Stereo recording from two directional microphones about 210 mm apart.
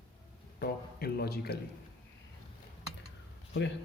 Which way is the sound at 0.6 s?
45° left (ahead or behind).